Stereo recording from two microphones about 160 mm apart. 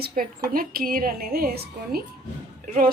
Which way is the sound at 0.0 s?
70° right (ahead or behind).